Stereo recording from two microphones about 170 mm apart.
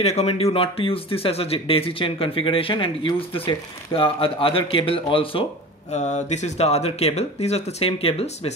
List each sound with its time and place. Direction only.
0.0 s speech: 40° left (ahead or behind)
5.9 s speech: 45° left (ahead or behind)